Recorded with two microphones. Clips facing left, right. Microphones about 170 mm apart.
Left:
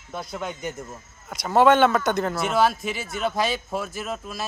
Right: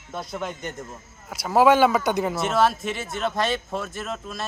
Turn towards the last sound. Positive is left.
turn(degrees=5)  # may be behind; listen again after turning